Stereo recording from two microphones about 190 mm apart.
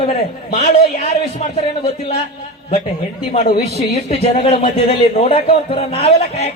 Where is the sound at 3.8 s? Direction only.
35° left (ahead or behind).